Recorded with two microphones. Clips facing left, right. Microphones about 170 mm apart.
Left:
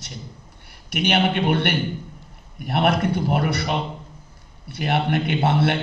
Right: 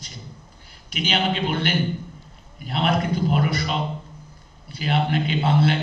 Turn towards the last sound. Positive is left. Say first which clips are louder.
# left 1 dB
turn(degrees=65)  # may be behind; listen again after turning